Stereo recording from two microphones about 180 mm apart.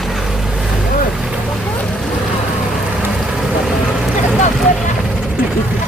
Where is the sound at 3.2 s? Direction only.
Centre (ahead or behind).